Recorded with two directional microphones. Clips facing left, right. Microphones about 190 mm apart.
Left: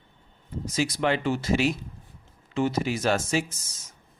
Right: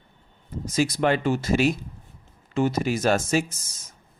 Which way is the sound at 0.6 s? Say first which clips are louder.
Right 3 dB; 45° right (ahead or behind).